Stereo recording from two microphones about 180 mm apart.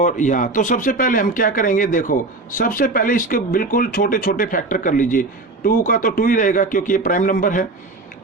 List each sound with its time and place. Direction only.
0.0 s speech: 45° left (ahead or behind)